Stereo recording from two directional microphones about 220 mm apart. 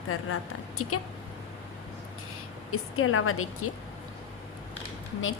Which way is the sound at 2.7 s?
70° left (ahead or behind).